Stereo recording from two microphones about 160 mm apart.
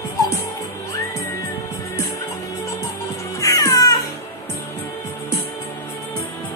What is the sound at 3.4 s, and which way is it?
Music, 20° left (ahead or behind).